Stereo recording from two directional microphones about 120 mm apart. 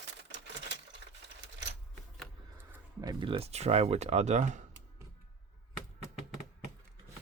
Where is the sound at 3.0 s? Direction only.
40° right (ahead or behind); by 4.6 s 85° right.